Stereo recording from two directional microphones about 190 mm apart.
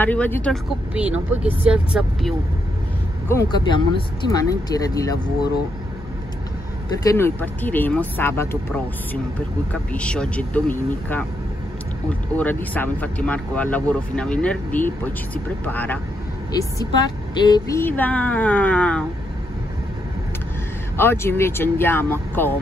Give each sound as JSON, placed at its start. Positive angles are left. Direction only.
{"t": 0.0, "sound": "speech", "side_deg": 10}
{"t": 0.9, "sound": "speech", "side_deg": -5}
{"t": 3.3, "sound": "speech", "side_deg": 20}
{"t": 7.1, "sound": "speech", "side_deg": 15}
{"t": 9.7, "sound": "speech", "side_deg": 5}
{"t": 16.5, "sound": "speech", "side_deg": 20}
{"t": 21.0, "sound": "speech", "side_deg": 10}